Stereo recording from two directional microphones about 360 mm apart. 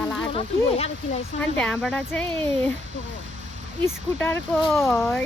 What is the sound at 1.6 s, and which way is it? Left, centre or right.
Speech, centre.